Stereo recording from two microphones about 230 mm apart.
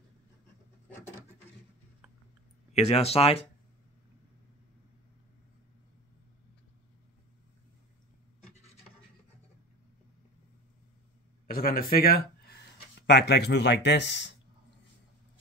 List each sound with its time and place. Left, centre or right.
2.7 s speech: left
11.4 s speech: left